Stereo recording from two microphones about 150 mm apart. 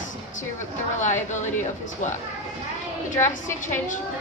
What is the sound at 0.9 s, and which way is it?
Speech, 55° left (ahead or behind).